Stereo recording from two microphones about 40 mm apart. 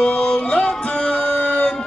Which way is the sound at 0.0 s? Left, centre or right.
Left.